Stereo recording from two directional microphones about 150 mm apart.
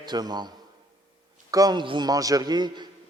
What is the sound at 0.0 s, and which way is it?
A man's voice, 30° right (ahead or behind).